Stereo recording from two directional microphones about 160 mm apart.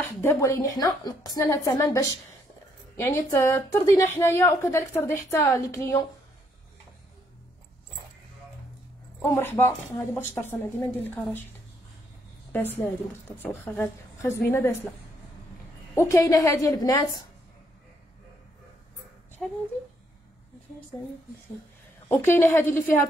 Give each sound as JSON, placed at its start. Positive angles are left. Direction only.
{"t": 0.2, "sound": "a woman's voice", "side_deg": 15}
{"t": 9.2, "sound": "a woman's voice", "side_deg": 15}
{"t": 12.5, "sound": "a woman's voice", "side_deg": 10}
{"t": 15.9, "sound": "a woman's voice", "side_deg": 15}
{"t": 19.4, "sound": "speech", "side_deg": 5}
{"t": 22.1, "sound": "a woman's voice", "side_deg": 15}